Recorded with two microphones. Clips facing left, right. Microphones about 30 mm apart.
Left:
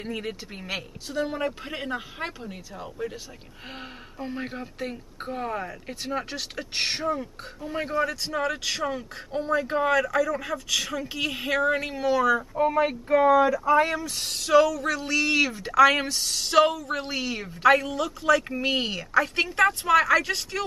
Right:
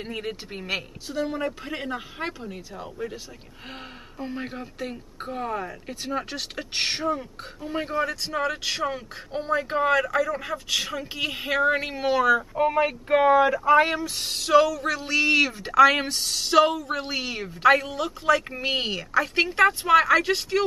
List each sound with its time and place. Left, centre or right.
0.0 s a man's voice: centre
1.2 s speech: centre
4.2 s speech: centre
6.5 s a man's voice: centre
12.7 s speech: right
14.1 s a man's voice: centre
19.4 s a man's voice: centre